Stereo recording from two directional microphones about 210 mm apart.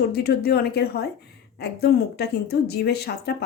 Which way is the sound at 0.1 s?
50° left (ahead or behind).